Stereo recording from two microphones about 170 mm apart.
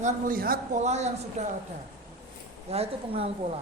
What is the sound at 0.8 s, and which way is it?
Speech, 40° right (ahead or behind).